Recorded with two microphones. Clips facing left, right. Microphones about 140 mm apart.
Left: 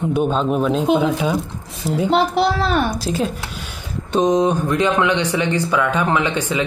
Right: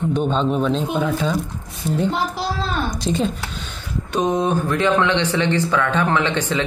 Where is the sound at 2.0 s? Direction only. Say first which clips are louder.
Left 6 dB; 70° left (ahead or behind).